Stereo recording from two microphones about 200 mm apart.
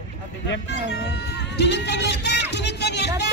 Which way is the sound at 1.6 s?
60° left (ahead or behind).